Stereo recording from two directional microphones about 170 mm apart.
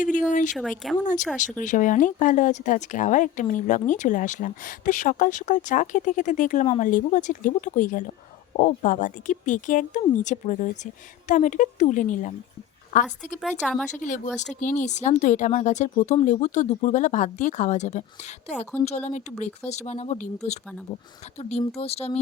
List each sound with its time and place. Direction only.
0.0 s speech: 50° left (ahead or behind)
0.8 s speech: centre (ahead or behind)
1.6 s a woman's voice: 50° left (ahead or behind)
13.4 s speech: 5° left (ahead or behind)
13.8 s speech: 45° left (ahead or behind)
21.8 s speech: 35° left (ahead or behind)